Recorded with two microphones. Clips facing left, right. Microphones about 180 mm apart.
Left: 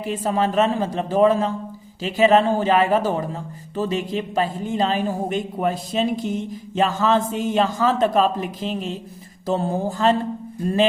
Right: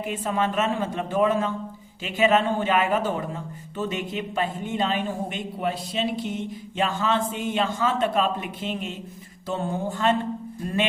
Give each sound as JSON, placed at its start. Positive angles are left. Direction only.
{"t": 0.0, "sound": "a man's voice", "side_deg": 35}